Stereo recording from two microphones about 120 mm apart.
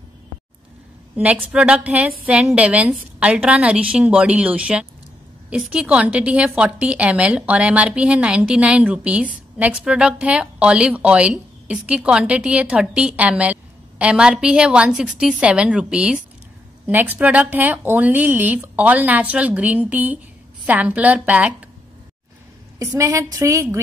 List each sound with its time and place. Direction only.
1.1 s a woman's voice: 10° right (ahead or behind)
22.9 s a woman's voice: 25° right (ahead or behind)